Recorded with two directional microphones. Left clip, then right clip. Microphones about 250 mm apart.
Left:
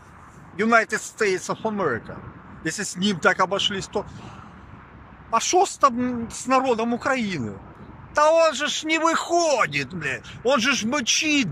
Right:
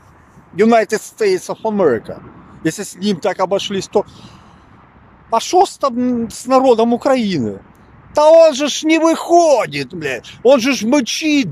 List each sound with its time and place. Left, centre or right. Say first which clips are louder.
0.6 s speech: right 7 dB; centre
5.3 s speech: right 7 dB; centre